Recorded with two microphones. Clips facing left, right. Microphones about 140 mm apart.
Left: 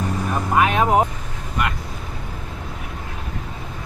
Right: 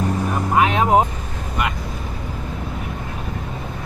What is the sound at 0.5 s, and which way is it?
Vehicle, 20° right (ahead or behind).